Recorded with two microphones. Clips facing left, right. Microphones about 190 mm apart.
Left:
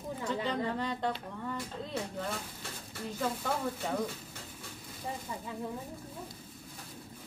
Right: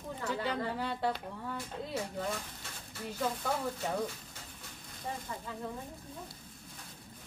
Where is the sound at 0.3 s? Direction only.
5° right (ahead or behind).